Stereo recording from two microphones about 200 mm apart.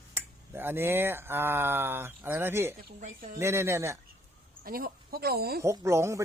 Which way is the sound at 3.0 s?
45° right (ahead or behind).